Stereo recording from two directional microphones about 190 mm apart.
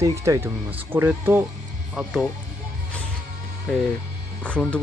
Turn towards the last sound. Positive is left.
turn(degrees=5)  # may be behind; listen again after turning